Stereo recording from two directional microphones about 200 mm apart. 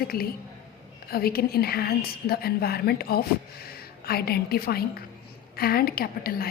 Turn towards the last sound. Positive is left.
turn(degrees=50)  # may be behind; listen again after turning